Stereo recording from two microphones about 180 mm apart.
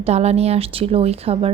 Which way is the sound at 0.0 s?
35° right (ahead or behind).